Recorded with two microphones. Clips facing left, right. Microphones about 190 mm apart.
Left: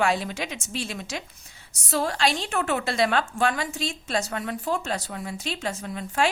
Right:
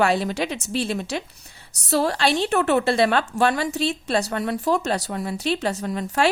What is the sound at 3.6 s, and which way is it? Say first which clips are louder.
A woman's voice: right 7 dB; 65° right (ahead or behind).